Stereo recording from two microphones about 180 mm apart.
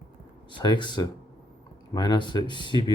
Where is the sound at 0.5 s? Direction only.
25° left (ahead or behind).